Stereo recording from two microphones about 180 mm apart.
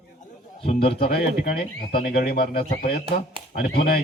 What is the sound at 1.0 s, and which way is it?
Speech, 60° left (ahead or behind).